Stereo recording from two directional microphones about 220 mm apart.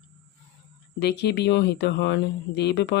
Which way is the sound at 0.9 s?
50° left (ahead or behind).